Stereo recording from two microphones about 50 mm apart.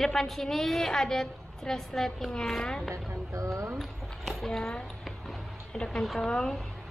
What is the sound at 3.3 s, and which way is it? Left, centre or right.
Speech, right.